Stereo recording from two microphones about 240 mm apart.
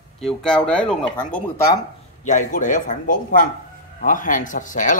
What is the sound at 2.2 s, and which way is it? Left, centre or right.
Speech, left.